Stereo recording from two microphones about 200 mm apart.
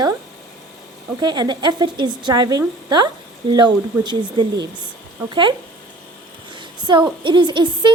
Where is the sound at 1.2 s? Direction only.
20° right (ahead or behind).